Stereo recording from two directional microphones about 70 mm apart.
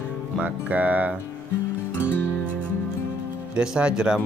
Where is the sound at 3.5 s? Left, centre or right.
Centre.